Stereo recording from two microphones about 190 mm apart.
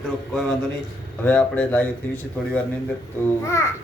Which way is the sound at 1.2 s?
10° left (ahead or behind).